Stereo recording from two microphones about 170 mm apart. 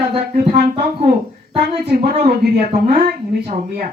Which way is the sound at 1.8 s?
65° right (ahead or behind).